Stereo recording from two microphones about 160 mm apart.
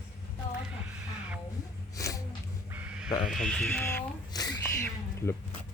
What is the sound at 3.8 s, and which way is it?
Speech, 20° left (ahead or behind).